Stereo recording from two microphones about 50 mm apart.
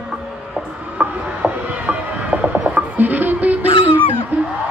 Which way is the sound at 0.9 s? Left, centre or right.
Right.